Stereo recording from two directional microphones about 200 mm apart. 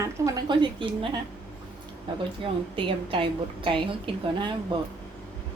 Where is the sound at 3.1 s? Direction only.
25° right (ahead or behind).